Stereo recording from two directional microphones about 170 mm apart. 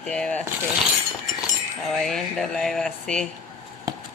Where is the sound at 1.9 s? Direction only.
Centre (ahead or behind).